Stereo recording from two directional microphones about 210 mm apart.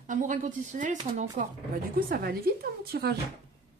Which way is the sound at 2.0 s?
45° right (ahead or behind).